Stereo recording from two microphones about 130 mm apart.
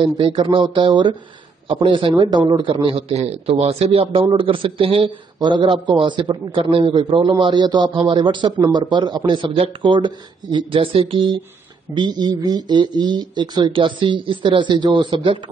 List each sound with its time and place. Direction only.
0.0 s a man's voice: 40° right (ahead or behind)